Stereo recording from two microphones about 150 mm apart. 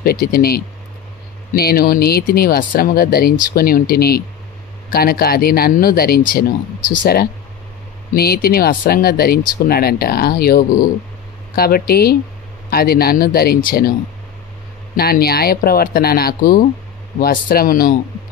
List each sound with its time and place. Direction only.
0.0 s speech: 90° left
6.9 s speech: 75° left (ahead or behind)
8.1 s speech: 90° left
15.0 s speech: 90° left